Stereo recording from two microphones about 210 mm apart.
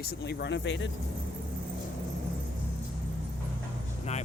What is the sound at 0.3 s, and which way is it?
Speech, 55° left (ahead or behind).